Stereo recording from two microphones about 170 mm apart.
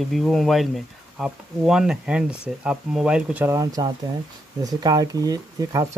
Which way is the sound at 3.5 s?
20° right (ahead or behind).